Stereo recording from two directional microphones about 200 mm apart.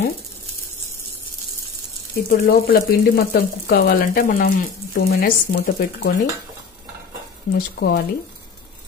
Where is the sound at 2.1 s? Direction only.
50° left (ahead or behind).